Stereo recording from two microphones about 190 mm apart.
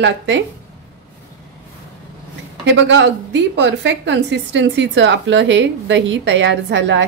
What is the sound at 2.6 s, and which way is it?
A woman's voice, 70° right (ahead or behind).